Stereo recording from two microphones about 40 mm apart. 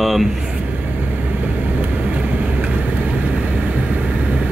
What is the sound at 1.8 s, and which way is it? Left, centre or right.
Vehicle, right.